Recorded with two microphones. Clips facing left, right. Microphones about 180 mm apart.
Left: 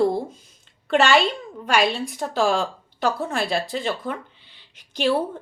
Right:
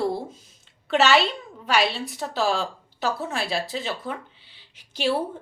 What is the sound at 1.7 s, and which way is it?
Speech, 45° left (ahead or behind).